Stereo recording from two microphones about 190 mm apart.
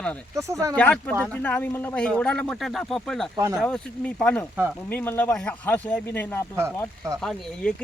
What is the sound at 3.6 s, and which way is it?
Speech, 5° left (ahead or behind).